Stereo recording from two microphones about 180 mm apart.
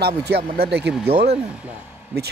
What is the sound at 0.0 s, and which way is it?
Speech, 65° right (ahead or behind).